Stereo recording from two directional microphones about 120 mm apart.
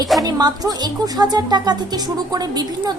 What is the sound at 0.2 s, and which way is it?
Speech, 30° right (ahead or behind).